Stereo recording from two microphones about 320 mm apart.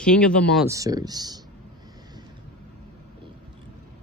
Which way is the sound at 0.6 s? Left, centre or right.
Centre.